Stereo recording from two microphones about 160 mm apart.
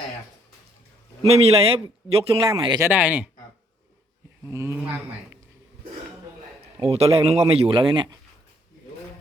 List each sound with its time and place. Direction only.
1.3 s speech: 40° right (ahead or behind)
2.7 s a man's voice: 15° right (ahead or behind)
4.4 s a man's voice: 15° right (ahead or behind)
6.8 s speech: 40° right (ahead or behind)